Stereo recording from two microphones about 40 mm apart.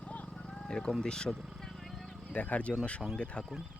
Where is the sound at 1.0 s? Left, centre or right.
Centre.